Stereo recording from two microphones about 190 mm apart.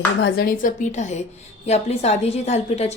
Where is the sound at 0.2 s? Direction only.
70° left (ahead or behind).